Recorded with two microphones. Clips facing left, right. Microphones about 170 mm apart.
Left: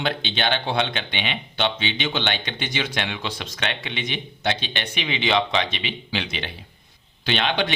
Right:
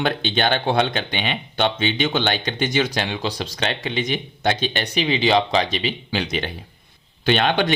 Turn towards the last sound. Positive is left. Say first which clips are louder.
# right 5 dB
turn(degrees=-45)  # may be behind; listen again after turning